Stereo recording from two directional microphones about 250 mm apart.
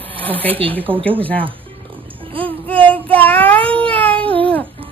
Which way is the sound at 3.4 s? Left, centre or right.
Centre.